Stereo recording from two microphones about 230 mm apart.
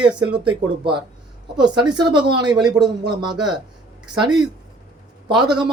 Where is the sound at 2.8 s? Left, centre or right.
Centre.